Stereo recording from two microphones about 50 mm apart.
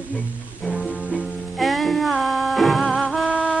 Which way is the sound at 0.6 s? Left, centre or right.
Centre.